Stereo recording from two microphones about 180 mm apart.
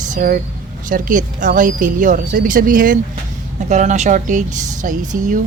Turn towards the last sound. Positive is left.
turn(degrees=-45)  # may be behind; listen again after turning